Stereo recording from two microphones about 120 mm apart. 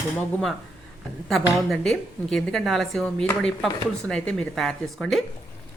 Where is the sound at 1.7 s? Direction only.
5° left (ahead or behind).